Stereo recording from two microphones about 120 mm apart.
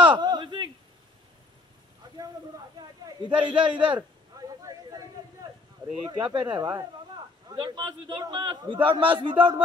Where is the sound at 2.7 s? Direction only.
35° right (ahead or behind).